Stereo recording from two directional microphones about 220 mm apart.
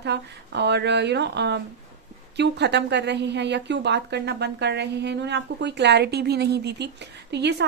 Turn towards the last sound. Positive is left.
turn(degrees=-50)  # may be behind; listen again after turning